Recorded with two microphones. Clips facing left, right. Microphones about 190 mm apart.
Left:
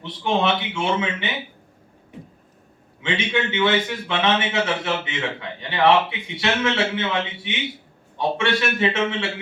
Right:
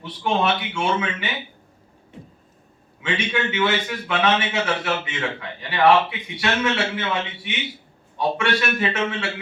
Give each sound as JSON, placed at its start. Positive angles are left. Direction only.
{"t": 0.0, "sound": "a man's voice", "side_deg": 25}
{"t": 3.0, "sound": "a man's voice", "side_deg": 25}
{"t": 8.4, "sound": "a man's voice", "side_deg": 25}